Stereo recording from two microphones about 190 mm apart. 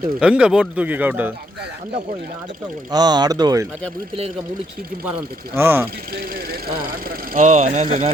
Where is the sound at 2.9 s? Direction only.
20° right (ahead or behind).